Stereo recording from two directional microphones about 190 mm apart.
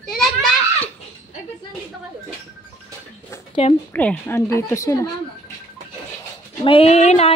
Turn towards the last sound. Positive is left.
turn(degrees=35)  # may be behind; listen again after turning